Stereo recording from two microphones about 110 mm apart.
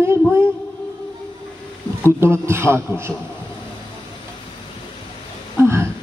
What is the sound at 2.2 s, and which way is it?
Speech, 25° right (ahead or behind).